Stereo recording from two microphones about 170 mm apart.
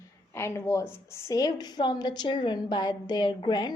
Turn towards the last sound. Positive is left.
turn(degrees=25)  # may be behind; listen again after turning